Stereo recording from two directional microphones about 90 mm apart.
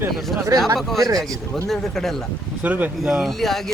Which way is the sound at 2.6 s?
20° right (ahead or behind).